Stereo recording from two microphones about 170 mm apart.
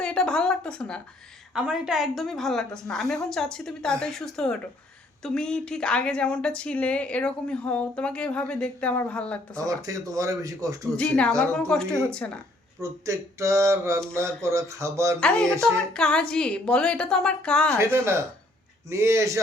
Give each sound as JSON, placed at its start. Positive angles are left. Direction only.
{"t": 0.0, "sound": "a woman's voice", "side_deg": 5}
{"t": 9.6, "sound": "speech", "side_deg": -20}
{"t": 10.9, "sound": "a woman's voice", "side_deg": 5}
{"t": 12.8, "sound": "a sound", "side_deg": -15}
{"t": 15.2, "sound": "a woman's voice", "side_deg": 5}
{"t": 17.7, "sound": "a sound", "side_deg": -15}